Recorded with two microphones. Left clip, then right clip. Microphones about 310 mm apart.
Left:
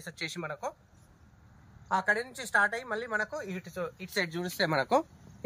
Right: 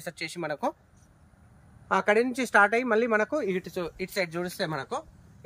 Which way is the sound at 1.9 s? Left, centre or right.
Right.